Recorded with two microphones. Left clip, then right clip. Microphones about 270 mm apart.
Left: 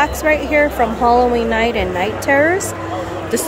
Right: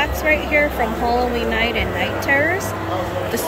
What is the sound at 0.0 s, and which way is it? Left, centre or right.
Speech, centre.